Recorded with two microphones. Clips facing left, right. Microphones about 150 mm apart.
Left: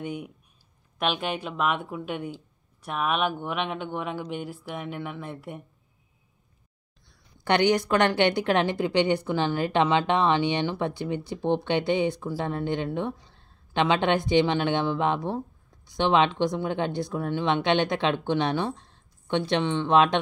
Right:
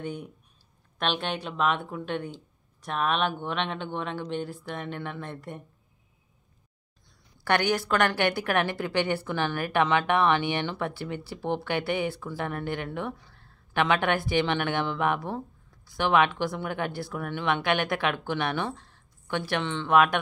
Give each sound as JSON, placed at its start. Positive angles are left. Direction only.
{"t": 0.0, "sound": "speech", "side_deg": 10}
{"t": 7.3, "sound": "a woman's voice", "side_deg": 20}